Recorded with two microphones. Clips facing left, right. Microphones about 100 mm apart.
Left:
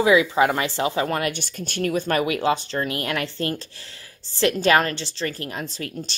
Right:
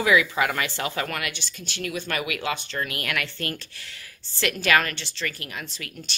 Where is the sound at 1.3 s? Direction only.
50° left (ahead or behind).